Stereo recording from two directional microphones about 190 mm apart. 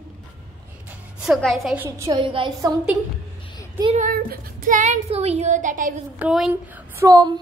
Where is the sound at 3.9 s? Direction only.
50° right (ahead or behind).